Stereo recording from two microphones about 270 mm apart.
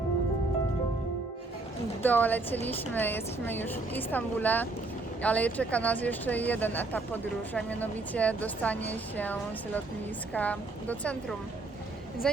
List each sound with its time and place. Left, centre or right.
2.0 s a woman's voice: centre